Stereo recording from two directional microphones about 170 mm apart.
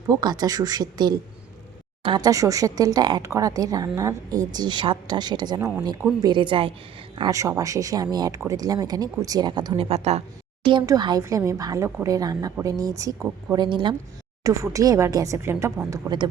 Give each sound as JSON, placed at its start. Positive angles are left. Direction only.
{"t": 0.1, "sound": "speech", "side_deg": -25}
{"t": 5.5, "sound": "speech", "side_deg": -15}
{"t": 6.2, "sound": "speech", "side_deg": -30}